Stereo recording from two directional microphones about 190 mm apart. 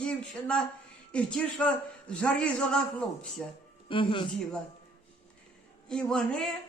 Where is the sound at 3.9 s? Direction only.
25° left (ahead or behind).